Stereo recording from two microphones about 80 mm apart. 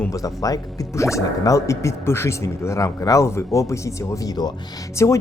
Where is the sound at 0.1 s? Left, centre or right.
Left.